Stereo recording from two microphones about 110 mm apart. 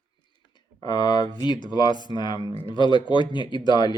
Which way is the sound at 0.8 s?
40° left (ahead or behind).